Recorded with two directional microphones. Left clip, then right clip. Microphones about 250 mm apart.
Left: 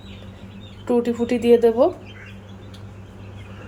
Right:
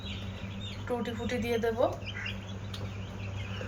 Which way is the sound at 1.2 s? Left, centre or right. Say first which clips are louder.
Left 12 dB; left.